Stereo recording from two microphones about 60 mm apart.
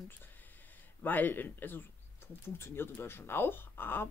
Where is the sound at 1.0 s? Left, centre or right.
Left.